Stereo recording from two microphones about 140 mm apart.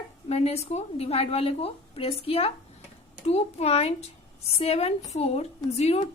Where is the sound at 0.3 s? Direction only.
50° left (ahead or behind).